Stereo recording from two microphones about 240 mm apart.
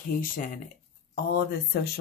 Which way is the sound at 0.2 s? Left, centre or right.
Left.